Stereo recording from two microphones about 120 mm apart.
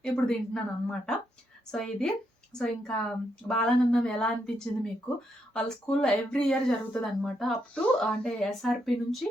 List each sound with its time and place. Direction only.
0.0 s speech: 5° left (ahead or behind)